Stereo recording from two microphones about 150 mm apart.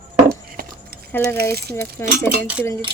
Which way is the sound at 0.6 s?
90° right.